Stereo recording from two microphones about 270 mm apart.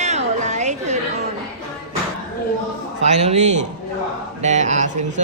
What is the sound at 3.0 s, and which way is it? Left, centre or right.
Speech, right.